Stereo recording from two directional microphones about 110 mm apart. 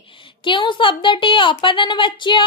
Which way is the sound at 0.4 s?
45° left (ahead or behind).